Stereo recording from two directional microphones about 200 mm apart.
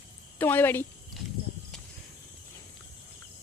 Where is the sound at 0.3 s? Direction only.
10° left (ahead or behind).